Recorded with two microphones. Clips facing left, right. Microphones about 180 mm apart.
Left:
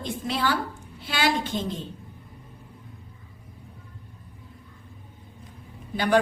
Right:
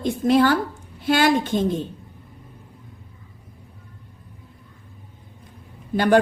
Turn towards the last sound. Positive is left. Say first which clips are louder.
# right 5 dB
turn(degrees=-50)  # may be behind; listen again after turning